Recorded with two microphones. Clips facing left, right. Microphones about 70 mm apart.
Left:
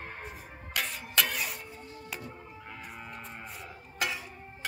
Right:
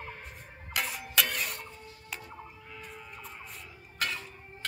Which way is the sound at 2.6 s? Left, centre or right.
Left.